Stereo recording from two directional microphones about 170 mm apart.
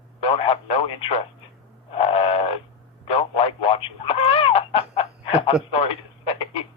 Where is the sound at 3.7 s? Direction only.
35° left (ahead or behind).